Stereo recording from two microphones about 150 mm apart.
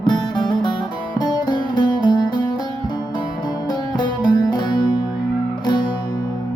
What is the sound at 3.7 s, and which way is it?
Music, 30° left (ahead or behind).